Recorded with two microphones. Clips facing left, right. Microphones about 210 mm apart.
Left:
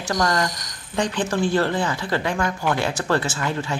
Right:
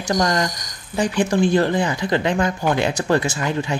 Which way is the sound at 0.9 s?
10° right (ahead or behind).